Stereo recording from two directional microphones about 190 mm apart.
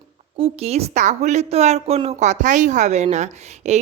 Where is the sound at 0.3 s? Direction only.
30° right (ahead or behind).